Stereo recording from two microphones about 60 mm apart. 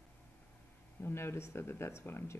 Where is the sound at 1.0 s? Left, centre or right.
Left.